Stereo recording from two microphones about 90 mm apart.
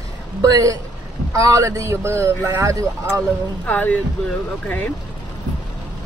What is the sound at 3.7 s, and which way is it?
Speech, 20° left (ahead or behind).